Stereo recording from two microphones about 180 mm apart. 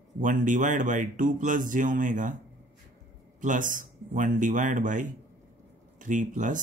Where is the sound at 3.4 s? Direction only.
45° right (ahead or behind).